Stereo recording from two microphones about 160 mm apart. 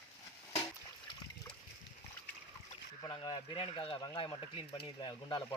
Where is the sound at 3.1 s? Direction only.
25° left (ahead or behind).